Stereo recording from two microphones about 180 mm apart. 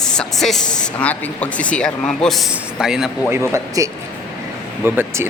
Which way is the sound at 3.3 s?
15° right (ahead or behind).